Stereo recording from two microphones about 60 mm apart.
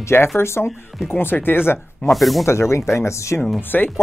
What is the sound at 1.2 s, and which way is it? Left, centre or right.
Speech, left.